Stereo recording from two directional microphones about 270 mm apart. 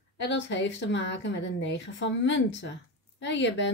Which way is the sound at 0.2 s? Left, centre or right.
Left.